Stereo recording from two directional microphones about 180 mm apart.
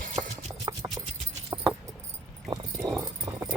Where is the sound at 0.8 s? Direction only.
20° right (ahead or behind).